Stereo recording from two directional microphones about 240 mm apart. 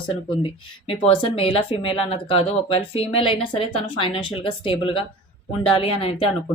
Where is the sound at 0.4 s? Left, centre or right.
Left.